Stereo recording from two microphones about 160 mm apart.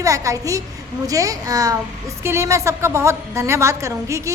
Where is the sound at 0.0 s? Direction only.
20° right (ahead or behind).